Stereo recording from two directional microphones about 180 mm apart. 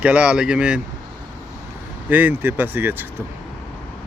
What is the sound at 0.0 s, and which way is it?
Speech, 5° right (ahead or behind).